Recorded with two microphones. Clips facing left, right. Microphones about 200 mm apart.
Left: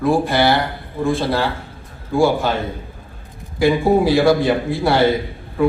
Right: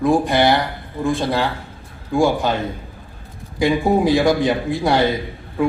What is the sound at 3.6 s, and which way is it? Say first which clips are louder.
A man's voice: left 2 dB; 15° right (ahead or behind).